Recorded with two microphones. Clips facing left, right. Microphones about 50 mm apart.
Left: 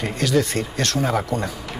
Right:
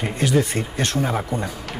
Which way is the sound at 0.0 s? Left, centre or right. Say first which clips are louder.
Even; centre.